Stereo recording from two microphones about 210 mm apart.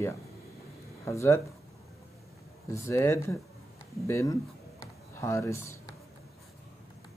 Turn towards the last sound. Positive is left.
turn(degrees=15)  # may be behind; listen again after turning